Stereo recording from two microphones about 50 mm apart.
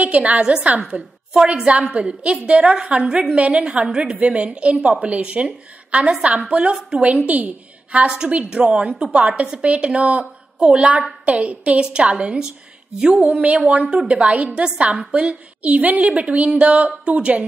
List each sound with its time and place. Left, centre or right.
0.0 s a woman's voice: right